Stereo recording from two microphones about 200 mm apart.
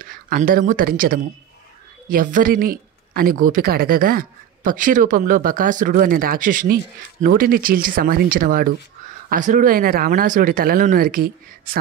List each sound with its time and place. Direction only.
0.0 s speech: 45° right (ahead or behind)